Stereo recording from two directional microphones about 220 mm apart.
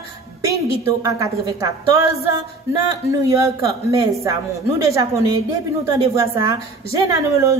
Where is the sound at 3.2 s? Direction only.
15° right (ahead or behind).